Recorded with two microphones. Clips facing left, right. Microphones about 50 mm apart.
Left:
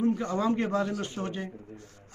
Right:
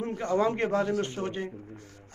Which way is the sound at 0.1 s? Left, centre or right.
Right.